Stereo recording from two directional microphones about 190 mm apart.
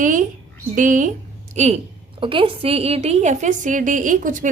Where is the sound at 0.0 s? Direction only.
40° right (ahead or behind).